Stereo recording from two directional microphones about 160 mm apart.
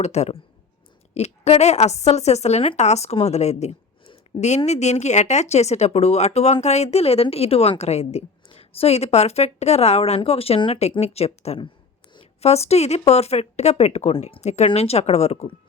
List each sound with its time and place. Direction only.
0.0 s a woman's voice: 45° left (ahead or behind)